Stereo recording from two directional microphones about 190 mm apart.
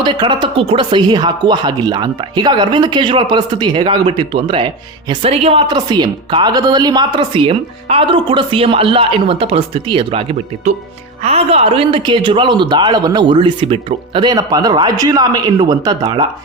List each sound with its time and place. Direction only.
0.0 s speech: 25° right (ahead or behind)